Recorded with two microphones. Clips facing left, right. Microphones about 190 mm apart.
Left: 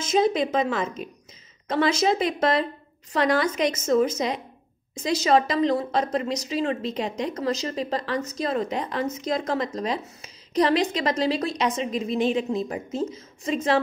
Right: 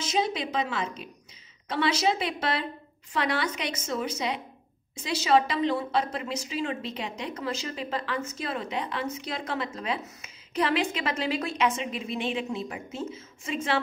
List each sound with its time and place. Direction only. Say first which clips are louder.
0.0 s a woman's voice: left 7 dB; 45° left (ahead or behind)